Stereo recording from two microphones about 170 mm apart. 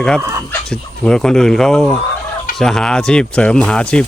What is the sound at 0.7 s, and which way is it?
Speech, 5° left (ahead or behind).